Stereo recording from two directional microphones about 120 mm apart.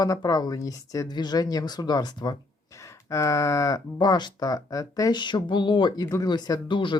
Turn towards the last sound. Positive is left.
turn(degrees=40)  # may be behind; listen again after turning